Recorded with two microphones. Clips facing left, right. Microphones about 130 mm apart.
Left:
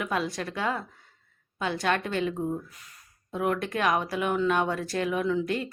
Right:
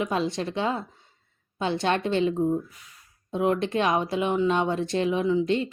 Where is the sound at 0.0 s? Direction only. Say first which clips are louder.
Right 3 dB; 25° right (ahead or behind).